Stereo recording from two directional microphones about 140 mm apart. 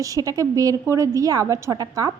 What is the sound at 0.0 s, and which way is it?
A woman's voice, 25° right (ahead or behind).